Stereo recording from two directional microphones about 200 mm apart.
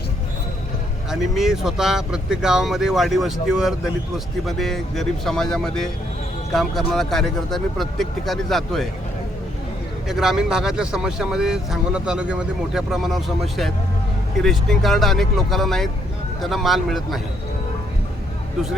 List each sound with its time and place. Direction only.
1.1 s speech: centre (ahead or behind)
10.1 s speech: centre (ahead or behind)